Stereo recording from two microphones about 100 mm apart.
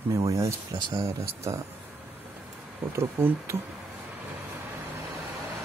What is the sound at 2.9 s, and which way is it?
Speech, 25° right (ahead or behind).